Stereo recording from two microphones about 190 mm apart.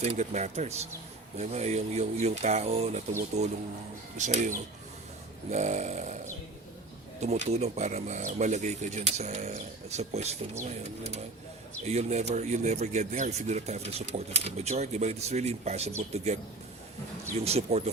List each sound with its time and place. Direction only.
0.0 s speech: 35° right (ahead or behind)
4.2 s speech: 40° right (ahead or behind)
7.2 s speech: 35° right (ahead or behind)
17.4 s speech: 35° right (ahead or behind)